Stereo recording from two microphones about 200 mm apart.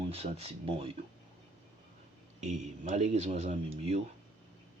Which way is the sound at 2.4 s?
35° right (ahead or behind).